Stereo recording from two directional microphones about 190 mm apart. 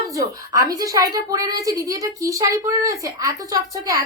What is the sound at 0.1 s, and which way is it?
A woman's voice, 20° right (ahead or behind).